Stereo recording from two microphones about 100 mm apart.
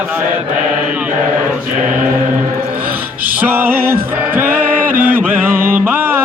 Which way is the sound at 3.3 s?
20° right (ahead or behind).